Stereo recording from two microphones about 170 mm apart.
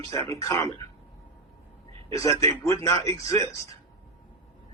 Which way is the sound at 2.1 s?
20° left (ahead or behind).